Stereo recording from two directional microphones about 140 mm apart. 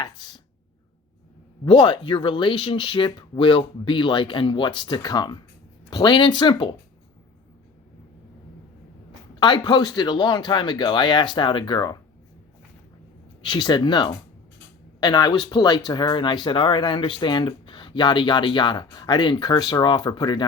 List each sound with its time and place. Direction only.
0.0 s speech: 35° left (ahead or behind)
1.6 s speech: 35° left (ahead or behind)
9.4 s speech: 30° left (ahead or behind)
13.4 s speech: 35° left (ahead or behind)